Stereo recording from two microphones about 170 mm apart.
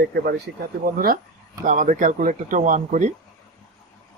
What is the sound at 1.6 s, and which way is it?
Speech, 50° right (ahead or behind).